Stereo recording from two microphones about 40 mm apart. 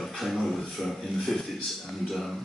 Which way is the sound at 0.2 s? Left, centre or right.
Centre.